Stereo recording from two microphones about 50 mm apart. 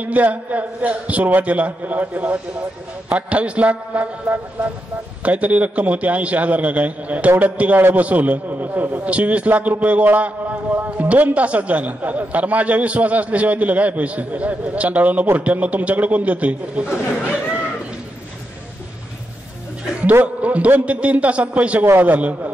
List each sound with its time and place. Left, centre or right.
0.0 s a man's voice: right
9.1 s a man's voice: right
10.0 s a sound: right
11.1 s a man's voice: right
20.4 s a man's voice: right